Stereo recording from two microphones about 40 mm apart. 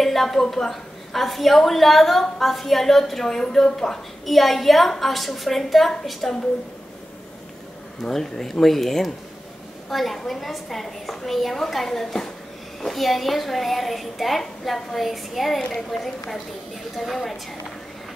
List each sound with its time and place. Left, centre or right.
0.0 s a woman's voice: centre
4.3 s a woman's voice: centre
8.0 s a woman's voice: centre